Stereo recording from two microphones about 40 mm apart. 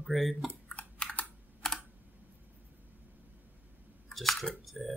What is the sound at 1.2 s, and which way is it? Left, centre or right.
Computer keyboard, left.